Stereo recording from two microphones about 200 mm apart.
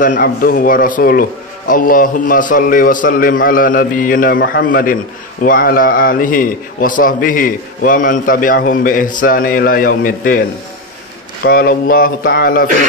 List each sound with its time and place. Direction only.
0.0 s a man's voice: 45° left (ahead or behind)
11.4 s a man's voice: 50° left (ahead or behind)